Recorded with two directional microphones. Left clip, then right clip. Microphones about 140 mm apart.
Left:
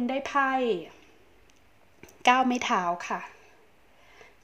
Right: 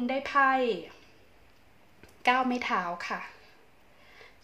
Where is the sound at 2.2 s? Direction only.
65° left (ahead or behind).